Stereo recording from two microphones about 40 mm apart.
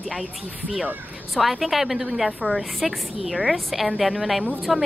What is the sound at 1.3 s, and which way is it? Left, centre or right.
Speech, centre.